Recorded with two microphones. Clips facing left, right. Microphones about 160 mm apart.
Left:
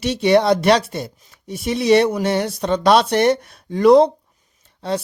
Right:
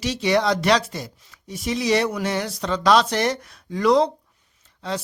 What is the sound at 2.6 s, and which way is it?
Speech, 55° left (ahead or behind).